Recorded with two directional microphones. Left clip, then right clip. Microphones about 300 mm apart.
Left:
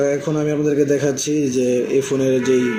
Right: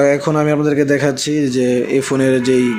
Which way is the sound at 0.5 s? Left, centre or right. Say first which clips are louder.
Right 3 dB; right.